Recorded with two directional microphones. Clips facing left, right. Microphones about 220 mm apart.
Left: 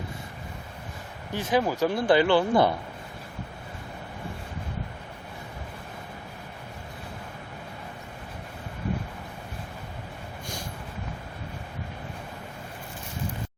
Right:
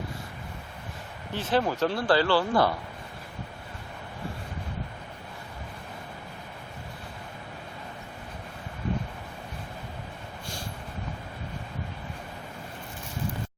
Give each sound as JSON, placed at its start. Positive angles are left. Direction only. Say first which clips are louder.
{"t": 1.3, "sound": "speech", "louder": "left 1 dB", "side_deg": 15}